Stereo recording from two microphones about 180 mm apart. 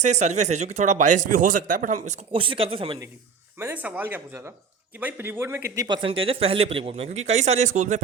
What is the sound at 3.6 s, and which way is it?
Speech, 10° right (ahead or behind).